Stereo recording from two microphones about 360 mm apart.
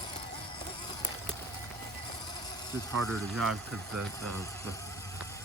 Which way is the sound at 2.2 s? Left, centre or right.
Centre.